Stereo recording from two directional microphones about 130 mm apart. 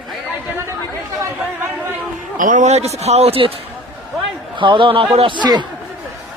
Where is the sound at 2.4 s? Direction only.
75° right (ahead or behind); by 3.5 s 50° right (ahead or behind).